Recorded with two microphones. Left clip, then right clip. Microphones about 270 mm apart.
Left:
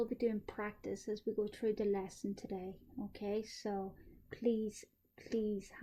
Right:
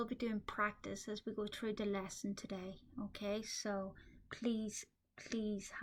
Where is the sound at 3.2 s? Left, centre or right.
Right.